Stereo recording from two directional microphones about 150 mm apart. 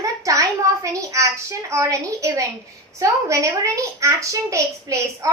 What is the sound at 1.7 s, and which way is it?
A child's voice, 20° right (ahead or behind).